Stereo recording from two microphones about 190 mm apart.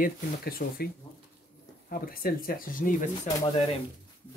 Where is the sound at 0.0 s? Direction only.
50° left (ahead or behind).